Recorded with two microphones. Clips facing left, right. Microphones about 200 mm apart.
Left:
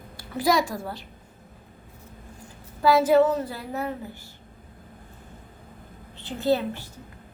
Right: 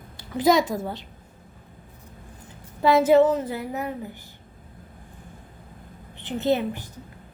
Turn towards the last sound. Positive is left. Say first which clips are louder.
# even
turn(degrees=-15)  # may be behind; listen again after turning